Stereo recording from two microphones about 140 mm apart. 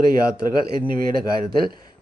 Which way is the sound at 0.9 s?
90° right.